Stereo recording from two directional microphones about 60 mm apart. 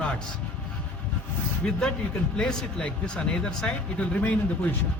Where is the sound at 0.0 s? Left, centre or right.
Centre.